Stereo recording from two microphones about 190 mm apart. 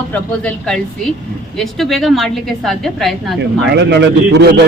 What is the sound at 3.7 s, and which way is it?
Speech, 60° right (ahead or behind).